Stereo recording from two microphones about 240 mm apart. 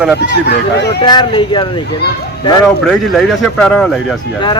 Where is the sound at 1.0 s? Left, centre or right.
Centre.